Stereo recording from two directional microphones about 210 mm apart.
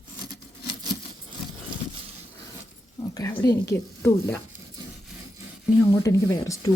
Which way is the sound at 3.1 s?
15° left (ahead or behind).